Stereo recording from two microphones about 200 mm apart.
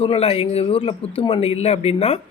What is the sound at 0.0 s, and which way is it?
Speech, 30° left (ahead or behind).